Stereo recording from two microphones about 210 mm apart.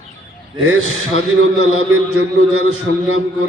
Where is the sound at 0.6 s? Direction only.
90° right.